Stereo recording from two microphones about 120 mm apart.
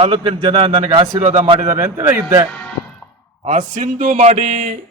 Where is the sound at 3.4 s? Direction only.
80° right.